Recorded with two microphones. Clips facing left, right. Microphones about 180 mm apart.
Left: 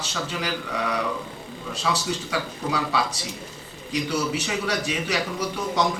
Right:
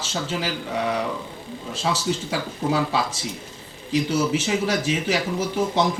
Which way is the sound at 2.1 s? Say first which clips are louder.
Right 2 dB; 30° right (ahead or behind).